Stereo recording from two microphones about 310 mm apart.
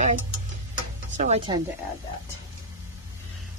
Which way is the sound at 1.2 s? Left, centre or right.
Centre.